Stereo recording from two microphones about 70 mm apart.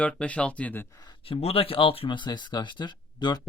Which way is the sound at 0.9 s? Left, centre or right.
Left.